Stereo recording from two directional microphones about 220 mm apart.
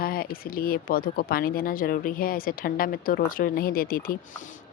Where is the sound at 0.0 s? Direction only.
45° left (ahead or behind).